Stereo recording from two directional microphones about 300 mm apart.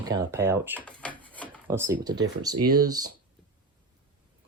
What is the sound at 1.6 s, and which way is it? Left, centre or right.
Speech, centre.